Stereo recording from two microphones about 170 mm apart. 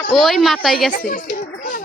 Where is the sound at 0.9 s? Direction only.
55° left (ahead or behind).